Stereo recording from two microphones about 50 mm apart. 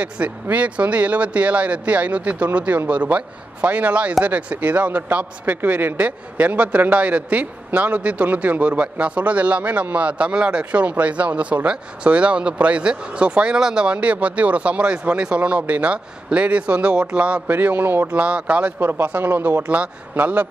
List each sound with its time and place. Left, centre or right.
0.0 s a man's voice: right
13.9 s speech: right
17.5 s a man's voice: right
18.1 s speech: right
19.0 s a man's voice: right
19.7 s a man's voice: right